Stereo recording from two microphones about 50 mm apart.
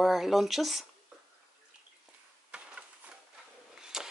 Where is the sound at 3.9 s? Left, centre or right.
Centre.